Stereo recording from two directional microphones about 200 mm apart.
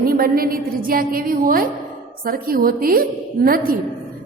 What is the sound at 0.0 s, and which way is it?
A woman's voice, 45° right (ahead or behind).